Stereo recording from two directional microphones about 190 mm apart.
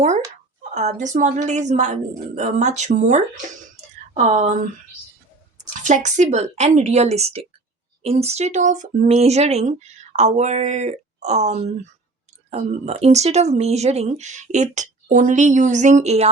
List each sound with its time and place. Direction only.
0.7 s speech: 35° right (ahead or behind)
3.8 s a sound: 35° right (ahead or behind)
5.8 s speech: 40° right (ahead or behind)